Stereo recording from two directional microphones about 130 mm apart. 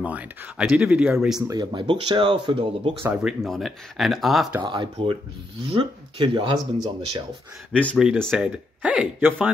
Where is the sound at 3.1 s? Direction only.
Centre (ahead or behind).